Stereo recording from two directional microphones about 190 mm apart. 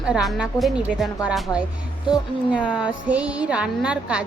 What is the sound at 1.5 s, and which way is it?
Speech, 15° left (ahead or behind).